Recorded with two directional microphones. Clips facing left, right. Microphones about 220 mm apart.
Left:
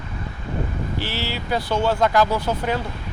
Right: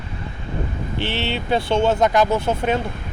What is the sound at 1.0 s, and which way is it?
Speech, 25° right (ahead or behind).